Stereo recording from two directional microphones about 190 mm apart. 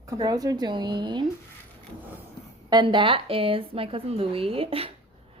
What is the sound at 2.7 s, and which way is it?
A woman's voice, 25° right (ahead or behind).